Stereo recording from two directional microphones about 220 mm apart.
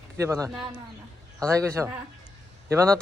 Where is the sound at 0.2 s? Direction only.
15° right (ahead or behind).